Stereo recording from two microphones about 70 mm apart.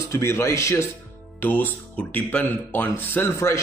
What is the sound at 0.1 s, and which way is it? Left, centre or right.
Speech, left.